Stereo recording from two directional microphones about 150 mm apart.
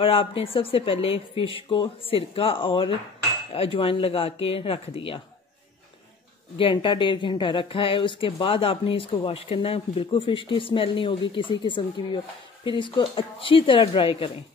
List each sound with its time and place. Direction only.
0.0 s speech: 35° left (ahead or behind)
6.6 s speech: 35° left (ahead or behind)